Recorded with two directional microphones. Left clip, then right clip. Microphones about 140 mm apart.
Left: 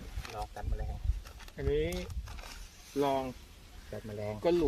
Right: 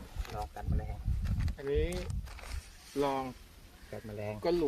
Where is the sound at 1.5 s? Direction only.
30° left (ahead or behind).